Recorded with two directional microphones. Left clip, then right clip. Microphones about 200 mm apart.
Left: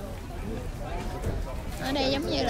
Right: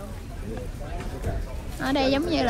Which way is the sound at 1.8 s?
Centre (ahead or behind).